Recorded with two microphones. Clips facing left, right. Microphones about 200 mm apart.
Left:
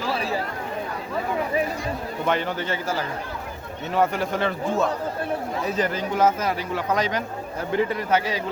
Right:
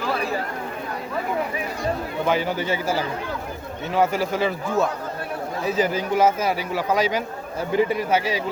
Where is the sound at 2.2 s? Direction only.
5° right (ahead or behind).